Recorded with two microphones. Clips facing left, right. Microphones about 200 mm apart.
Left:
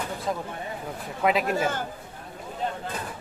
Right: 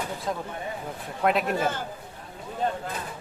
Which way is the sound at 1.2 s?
Centre (ahead or behind).